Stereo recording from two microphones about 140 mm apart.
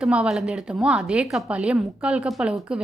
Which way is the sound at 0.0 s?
5° right (ahead or behind).